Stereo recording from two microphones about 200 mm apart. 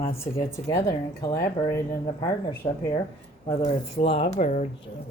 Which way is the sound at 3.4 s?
25° left (ahead or behind).